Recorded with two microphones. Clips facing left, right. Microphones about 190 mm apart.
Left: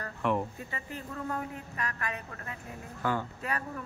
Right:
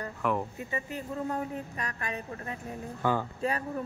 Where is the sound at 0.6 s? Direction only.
20° right (ahead or behind).